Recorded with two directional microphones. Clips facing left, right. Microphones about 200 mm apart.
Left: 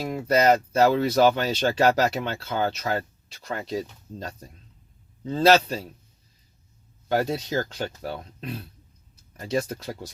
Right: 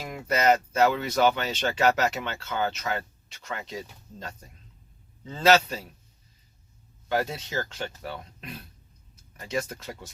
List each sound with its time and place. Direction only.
0.0 s speech: 35° left (ahead or behind)
7.1 s speech: 35° left (ahead or behind)
9.5 s speech: 35° left (ahead or behind)